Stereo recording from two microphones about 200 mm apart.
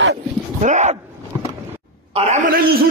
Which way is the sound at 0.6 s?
35° right (ahead or behind).